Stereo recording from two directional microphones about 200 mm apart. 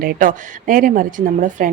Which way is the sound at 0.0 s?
45° right (ahead or behind).